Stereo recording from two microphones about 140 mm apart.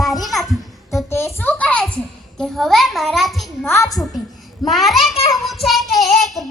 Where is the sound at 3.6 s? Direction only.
20° left (ahead or behind).